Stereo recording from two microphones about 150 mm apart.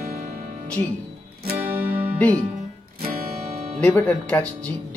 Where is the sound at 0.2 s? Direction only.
80° right.